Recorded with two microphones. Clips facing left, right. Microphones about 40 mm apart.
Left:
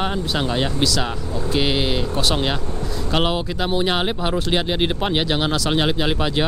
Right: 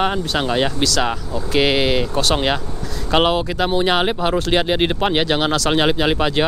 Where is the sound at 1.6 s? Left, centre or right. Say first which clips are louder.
Right 5 dB; right.